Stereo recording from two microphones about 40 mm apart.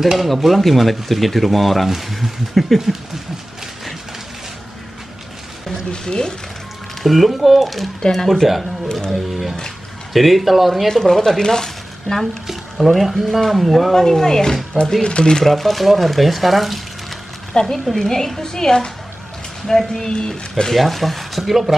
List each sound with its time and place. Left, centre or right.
0.3 s speech: centre
5.9 s speech: centre
7.0 s speech: centre
10.1 s speech: centre
10.9 s speech: centre
12.4 s speech: centre
13.9 s speech: centre
15.4 s speech: centre
17.6 s speech: centre
19.9 s speech: centre
20.7 s speech: centre